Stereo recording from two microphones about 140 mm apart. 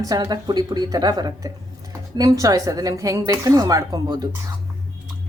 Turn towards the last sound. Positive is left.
turn(degrees=-25)  # may be behind; listen again after turning